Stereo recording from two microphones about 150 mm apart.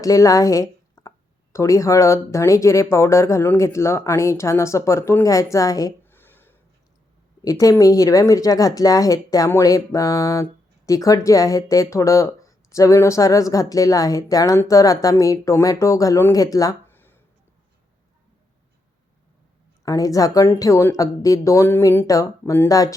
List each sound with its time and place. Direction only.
0.0 s a woman's voice: 20° left (ahead or behind)
19.8 s speech: 20° left (ahead or behind)